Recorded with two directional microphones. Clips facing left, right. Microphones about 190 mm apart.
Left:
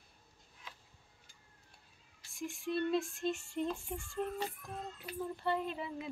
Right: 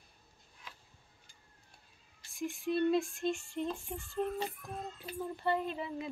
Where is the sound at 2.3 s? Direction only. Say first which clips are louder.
Right 3 dB; centre (ahead or behind).